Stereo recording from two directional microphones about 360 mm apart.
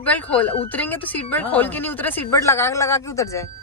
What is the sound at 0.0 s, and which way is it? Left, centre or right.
Speech, centre.